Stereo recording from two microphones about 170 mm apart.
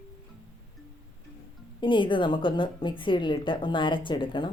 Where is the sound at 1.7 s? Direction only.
30° left (ahead or behind).